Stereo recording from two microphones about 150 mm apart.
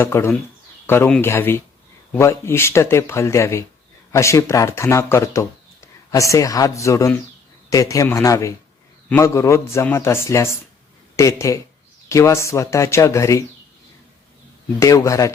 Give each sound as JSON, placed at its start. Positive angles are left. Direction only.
{"t": 0.0, "sound": "speech", "side_deg": 15}
{"t": 14.8, "sound": "speech", "side_deg": 20}